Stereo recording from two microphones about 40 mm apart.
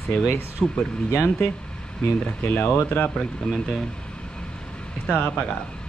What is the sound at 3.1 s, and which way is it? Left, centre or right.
Speech, centre.